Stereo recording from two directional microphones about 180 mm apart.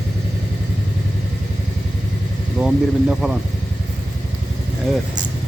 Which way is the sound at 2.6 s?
5° right (ahead or behind).